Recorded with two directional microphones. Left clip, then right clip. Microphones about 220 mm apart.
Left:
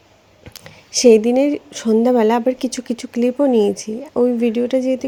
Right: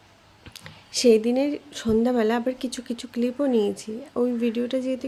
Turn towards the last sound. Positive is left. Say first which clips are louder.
# left 9 dB
turn(degrees=20)  # may be behind; listen again after turning